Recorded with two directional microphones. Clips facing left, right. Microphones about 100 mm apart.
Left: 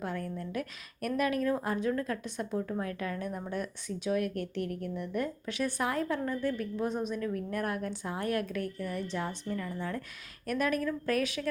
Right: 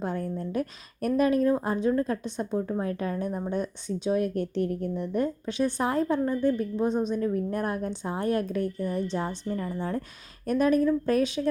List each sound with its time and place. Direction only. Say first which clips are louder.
0.0 s a woman's voice: right 5 dB; 30° right (ahead or behind)